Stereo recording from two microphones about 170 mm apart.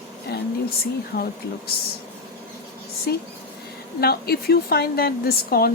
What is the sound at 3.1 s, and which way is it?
A woman's voice, 70° left (ahead or behind).